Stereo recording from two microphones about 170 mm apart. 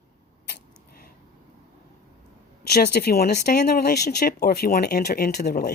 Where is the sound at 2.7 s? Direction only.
70° left (ahead or behind).